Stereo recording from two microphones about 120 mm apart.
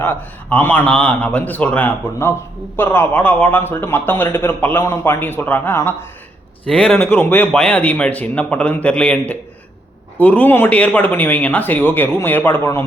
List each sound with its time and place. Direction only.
0.0 s a man's voice: 15° left (ahead or behind)
6.7 s a man's voice: 10° left (ahead or behind)